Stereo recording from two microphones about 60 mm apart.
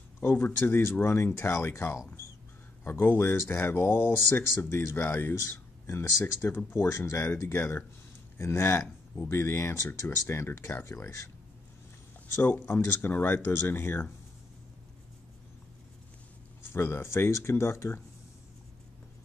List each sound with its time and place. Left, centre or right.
0.2 s speech: left
0.5 s speech: left
2.8 s speech: left
5.0 s speech: left
5.9 s speech: left
6.4 s speech: left
10.8 s speech: left
12.4 s speech: left
16.6 s speech: left